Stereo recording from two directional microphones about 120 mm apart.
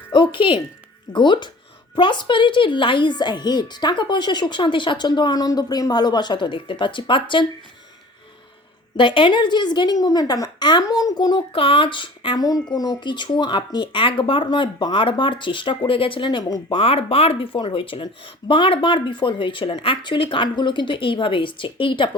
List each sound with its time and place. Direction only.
0.1 s music: 45° left (ahead or behind)
1.1 s speech: 40° left (ahead or behind)
9.0 s speech: 45° left (ahead or behind)
11.5 s speech: 50° left (ahead or behind)
16.8 s speech: 50° left (ahead or behind)